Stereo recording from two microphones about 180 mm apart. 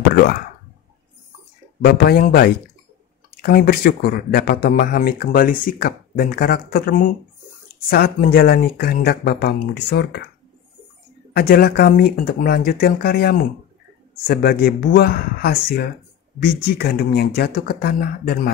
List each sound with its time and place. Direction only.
0.1 s speech: 60° left (ahead or behind)
1.8 s speech: 55° left (ahead or behind)
11.3 s speech: 60° left (ahead or behind)